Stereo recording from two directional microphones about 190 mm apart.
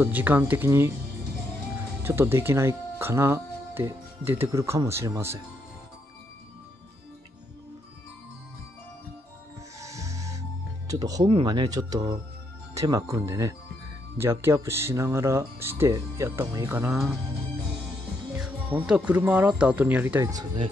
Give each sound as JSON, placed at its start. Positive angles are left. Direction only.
{"t": 0.0, "sound": "speech", "side_deg": -10}
{"t": 2.0, "sound": "speech", "side_deg": -10}
{"t": 9.8, "sound": "music", "side_deg": -15}
{"t": 10.9, "sound": "speech", "side_deg": -20}
{"t": 18.4, "sound": "speech", "side_deg": -5}